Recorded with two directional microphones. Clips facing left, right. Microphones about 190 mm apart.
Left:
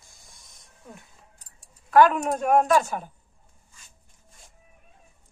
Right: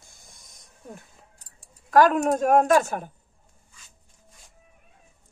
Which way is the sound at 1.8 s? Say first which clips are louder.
Even; 40° right (ahead or behind).